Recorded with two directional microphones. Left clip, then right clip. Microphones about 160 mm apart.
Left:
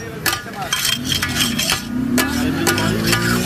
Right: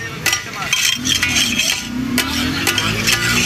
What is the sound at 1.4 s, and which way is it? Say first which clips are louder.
Stir: right 2 dB; centre (ahead or behind).